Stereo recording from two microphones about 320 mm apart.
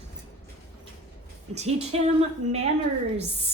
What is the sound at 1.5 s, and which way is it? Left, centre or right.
Speech, centre.